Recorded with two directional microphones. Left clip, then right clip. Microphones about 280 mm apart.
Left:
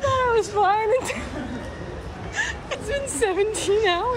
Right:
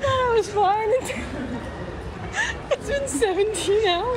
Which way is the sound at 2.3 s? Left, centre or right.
Centre.